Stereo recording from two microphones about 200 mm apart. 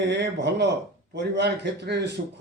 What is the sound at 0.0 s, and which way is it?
A man's voice, 60° right (ahead or behind).